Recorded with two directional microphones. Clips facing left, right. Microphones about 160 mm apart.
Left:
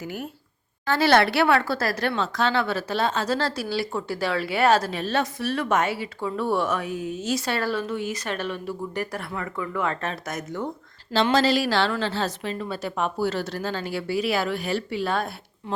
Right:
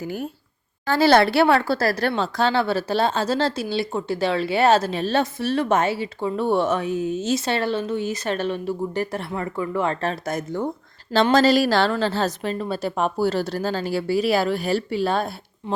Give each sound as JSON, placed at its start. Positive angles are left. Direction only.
{"t": 0.0, "sound": "a woman's voice", "side_deg": -35}
{"t": 11.1, "sound": "a woman's voice", "side_deg": -50}